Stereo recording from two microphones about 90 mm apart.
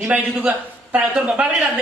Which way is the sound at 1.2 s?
5° right (ahead or behind).